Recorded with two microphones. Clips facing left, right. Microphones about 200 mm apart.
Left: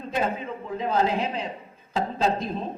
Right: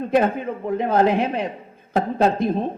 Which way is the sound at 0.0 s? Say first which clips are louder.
Right 8 dB; 60° right (ahead or behind).